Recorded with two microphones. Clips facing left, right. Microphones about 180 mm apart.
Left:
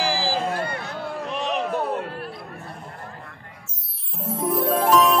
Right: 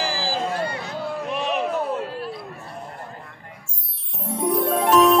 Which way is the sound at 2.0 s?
55° left (ahead or behind).